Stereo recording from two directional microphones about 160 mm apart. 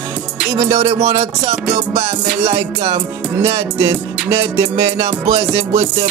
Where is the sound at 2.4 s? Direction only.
40° right (ahead or behind).